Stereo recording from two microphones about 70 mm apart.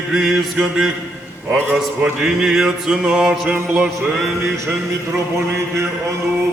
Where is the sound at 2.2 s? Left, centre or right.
Centre.